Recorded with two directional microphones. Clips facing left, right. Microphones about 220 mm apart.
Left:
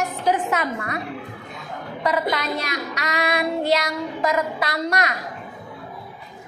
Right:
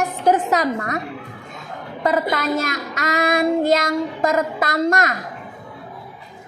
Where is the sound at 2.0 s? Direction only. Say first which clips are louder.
Right 3 dB; 45° right (ahead or behind).